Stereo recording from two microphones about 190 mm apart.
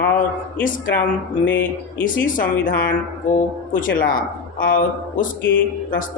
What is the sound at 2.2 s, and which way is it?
Speech, 45° left (ahead or behind).